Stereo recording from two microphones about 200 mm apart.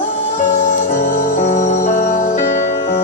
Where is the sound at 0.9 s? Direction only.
35° left (ahead or behind).